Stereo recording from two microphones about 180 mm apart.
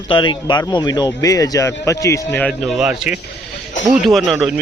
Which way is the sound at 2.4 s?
5° right (ahead or behind).